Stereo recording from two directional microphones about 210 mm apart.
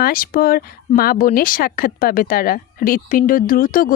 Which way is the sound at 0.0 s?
45° left (ahead or behind).